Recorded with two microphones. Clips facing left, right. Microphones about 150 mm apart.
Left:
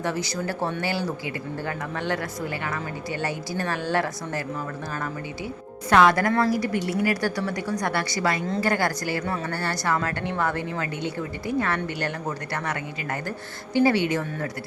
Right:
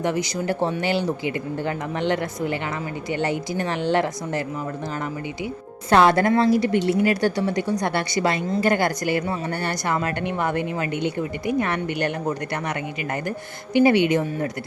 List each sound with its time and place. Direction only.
0.0 s speech: 15° right (ahead or behind)
5.9 s a woman's voice: 30° right (ahead or behind)